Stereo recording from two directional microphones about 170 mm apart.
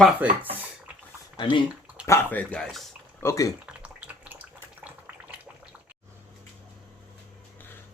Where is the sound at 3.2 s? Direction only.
20° left (ahead or behind).